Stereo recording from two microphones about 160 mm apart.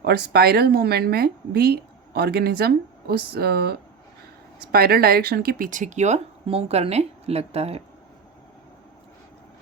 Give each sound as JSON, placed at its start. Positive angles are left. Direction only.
{"t": 0.0, "sound": "speech", "side_deg": -80}